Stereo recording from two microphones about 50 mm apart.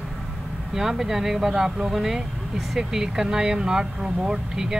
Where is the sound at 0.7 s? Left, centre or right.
Centre.